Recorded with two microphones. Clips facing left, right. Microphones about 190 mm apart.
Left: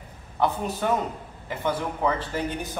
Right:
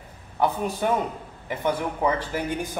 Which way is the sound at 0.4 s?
10° right (ahead or behind).